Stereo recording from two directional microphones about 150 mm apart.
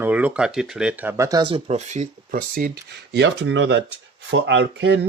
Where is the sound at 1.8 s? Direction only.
50° right (ahead or behind).